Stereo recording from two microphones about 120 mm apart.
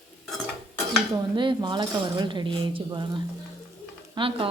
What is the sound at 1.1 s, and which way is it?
Speech, 40° right (ahead or behind).